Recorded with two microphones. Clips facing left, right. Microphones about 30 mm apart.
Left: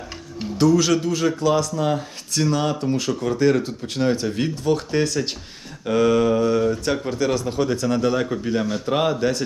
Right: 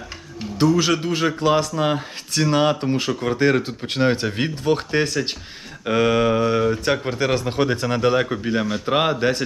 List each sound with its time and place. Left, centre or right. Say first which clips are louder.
0.6 s a man's voice: left 1 dB; centre